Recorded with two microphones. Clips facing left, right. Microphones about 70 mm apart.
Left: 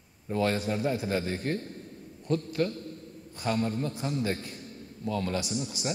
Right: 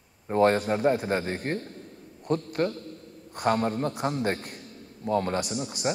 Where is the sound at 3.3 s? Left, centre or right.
Right.